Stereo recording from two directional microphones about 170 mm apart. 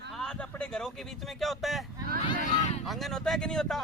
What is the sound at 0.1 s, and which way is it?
Speech, 5° left (ahead or behind).